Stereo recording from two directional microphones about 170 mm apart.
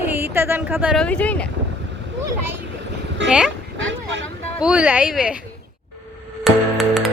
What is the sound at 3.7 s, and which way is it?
Vehicle, 90° right.